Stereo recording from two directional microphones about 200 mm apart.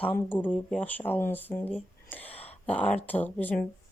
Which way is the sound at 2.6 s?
5° left (ahead or behind).